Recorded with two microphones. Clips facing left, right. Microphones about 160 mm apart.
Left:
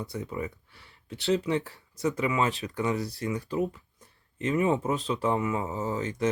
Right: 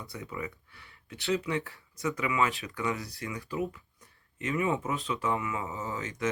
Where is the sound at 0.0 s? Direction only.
25° left (ahead or behind).